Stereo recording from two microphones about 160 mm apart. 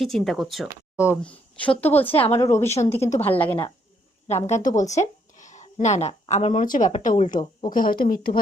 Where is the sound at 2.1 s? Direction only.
35° left (ahead or behind).